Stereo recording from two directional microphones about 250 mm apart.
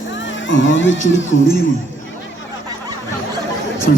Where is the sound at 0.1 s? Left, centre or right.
Left.